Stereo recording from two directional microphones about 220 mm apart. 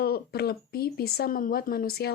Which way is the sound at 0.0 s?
45° left (ahead or behind).